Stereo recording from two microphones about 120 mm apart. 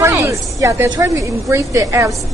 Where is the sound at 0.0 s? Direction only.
25° right (ahead or behind).